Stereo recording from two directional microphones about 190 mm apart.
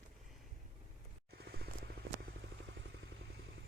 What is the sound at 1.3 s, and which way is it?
Vehicle, 60° right (ahead or behind).